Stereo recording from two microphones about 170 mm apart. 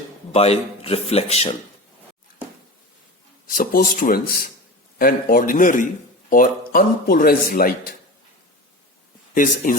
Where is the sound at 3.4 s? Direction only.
55° left (ahead or behind).